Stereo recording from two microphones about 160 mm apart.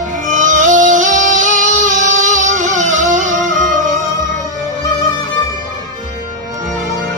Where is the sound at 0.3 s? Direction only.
55° right (ahead or behind).